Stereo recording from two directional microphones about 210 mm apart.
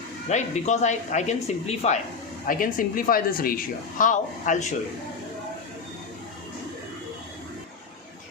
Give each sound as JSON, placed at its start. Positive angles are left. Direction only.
{"t": 0.3, "sound": "speech", "side_deg": 35}